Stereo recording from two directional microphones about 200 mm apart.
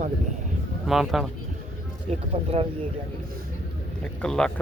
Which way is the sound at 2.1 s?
30° right (ahead or behind).